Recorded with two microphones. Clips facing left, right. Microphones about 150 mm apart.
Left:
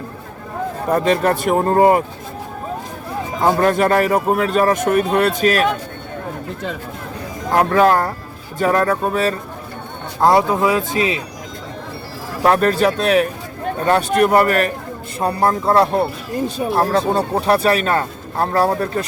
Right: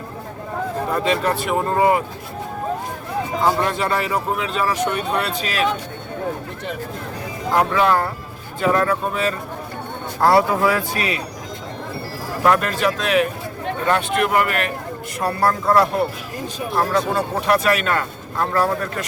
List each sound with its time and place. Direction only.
0.9 s speech: 45° left (ahead or behind)
3.4 s speech: 50° left (ahead or behind)
7.5 s speech: 45° left (ahead or behind)
10.2 s speech: 20° left (ahead or behind)
12.5 s speech: 35° left (ahead or behind)
15.2 s speech: 20° left (ahead or behind)